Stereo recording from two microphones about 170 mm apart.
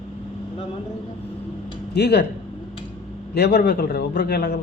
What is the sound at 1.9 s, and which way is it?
Speech, 75° left (ahead or behind).